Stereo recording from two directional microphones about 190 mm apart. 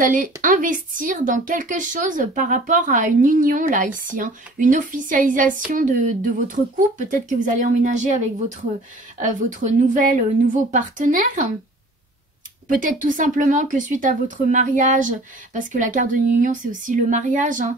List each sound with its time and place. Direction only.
0.0 s a woman's voice: 45° right (ahead or behind)
12.6 s speech: 45° right (ahead or behind)